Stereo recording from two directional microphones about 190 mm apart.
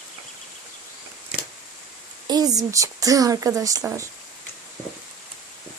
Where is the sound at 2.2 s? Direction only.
20° right (ahead or behind).